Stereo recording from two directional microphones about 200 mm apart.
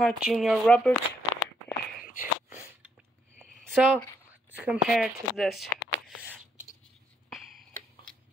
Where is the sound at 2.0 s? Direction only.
40° left (ahead or behind).